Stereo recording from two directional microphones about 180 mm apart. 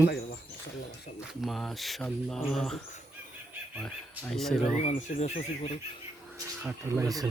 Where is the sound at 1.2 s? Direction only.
Centre (ahead or behind).